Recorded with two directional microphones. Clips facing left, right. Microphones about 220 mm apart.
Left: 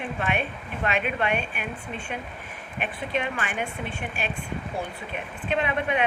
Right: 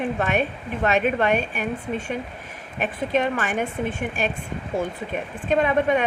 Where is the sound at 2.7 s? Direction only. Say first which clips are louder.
Right 6 dB; 40° right (ahead or behind).